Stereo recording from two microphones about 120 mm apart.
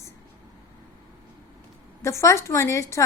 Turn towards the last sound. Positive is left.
turn(degrees=25)  # may be behind; listen again after turning